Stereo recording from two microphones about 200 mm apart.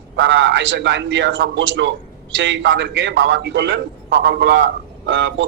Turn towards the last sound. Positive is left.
turn(degrees=-65)  # may be behind; listen again after turning